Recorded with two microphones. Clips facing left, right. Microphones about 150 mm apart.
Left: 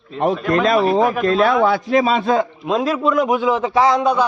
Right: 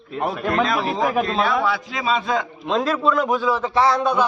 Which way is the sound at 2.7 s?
10° left (ahead or behind).